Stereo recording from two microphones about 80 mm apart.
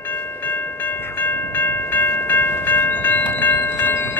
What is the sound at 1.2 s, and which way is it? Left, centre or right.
Train, left.